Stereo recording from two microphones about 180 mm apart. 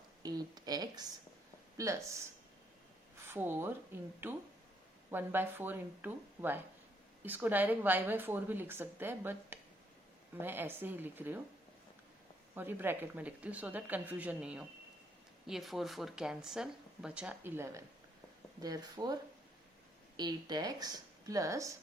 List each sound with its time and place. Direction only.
0.2 s a woman's voice: 20° right (ahead or behind)
3.2 s a woman's voice: 10° right (ahead or behind)
12.5 s a woman's voice: 10° right (ahead or behind)